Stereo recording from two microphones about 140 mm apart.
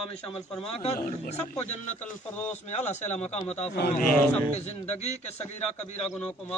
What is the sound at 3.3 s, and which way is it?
Speech, 10° left (ahead or behind).